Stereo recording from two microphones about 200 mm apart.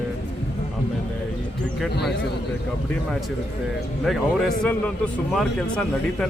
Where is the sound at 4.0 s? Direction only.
Centre (ahead or behind).